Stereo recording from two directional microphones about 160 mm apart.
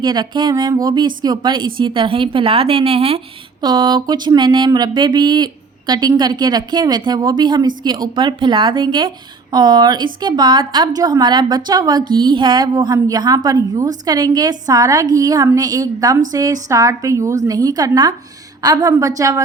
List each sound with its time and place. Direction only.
0.0 s a woman's voice: 25° right (ahead or behind)